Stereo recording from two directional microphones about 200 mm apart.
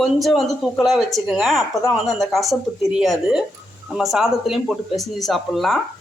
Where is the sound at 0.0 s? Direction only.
Centre (ahead or behind).